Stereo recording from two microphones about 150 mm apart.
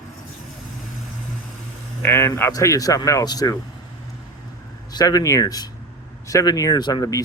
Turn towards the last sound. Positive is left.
turn(degrees=25)  # may be behind; listen again after turning